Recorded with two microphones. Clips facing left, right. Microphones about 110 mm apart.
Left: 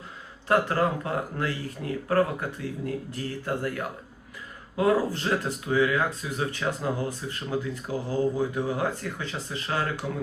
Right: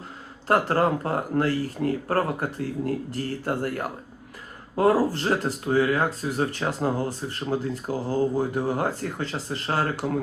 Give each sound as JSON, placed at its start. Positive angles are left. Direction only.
{"t": 0.4, "sound": "speech", "side_deg": -40}